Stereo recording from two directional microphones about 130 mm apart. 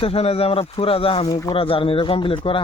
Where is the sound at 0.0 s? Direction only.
50° left (ahead or behind).